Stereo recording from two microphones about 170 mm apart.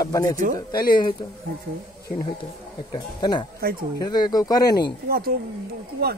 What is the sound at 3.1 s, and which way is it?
Speech, 25° left (ahead or behind).